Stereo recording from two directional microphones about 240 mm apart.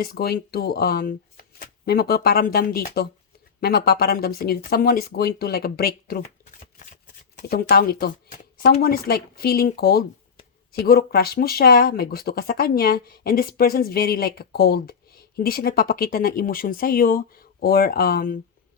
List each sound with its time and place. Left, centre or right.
0.0 s speech: left